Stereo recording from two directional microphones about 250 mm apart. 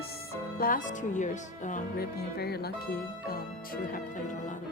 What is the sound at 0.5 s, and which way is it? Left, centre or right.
Speech, left.